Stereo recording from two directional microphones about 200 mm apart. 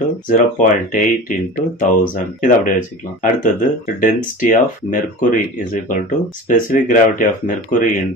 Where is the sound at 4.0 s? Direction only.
40° left (ahead or behind).